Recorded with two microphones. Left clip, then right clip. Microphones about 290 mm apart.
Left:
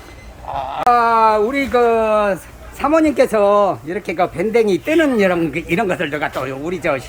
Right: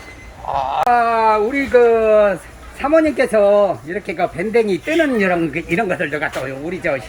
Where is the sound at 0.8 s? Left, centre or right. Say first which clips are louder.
Left 3 dB; centre.